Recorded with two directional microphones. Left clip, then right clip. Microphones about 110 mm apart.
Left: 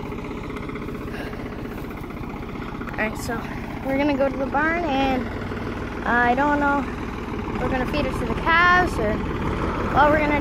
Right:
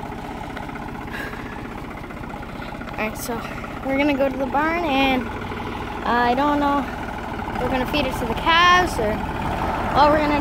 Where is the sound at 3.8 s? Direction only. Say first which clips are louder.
Right 1 dB; 30° right (ahead or behind).